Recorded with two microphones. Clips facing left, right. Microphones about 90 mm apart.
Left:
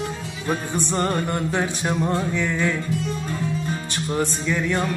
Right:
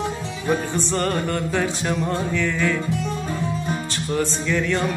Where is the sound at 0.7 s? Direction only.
20° left (ahead or behind).